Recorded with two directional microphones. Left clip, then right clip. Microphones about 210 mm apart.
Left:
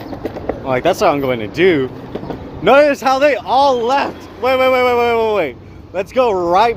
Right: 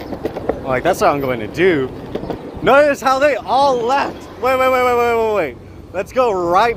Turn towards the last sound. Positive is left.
turn(degrees=20)  # may be behind; listen again after turning